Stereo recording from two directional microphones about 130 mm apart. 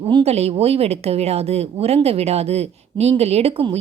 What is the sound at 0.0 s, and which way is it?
Speech, 45° right (ahead or behind).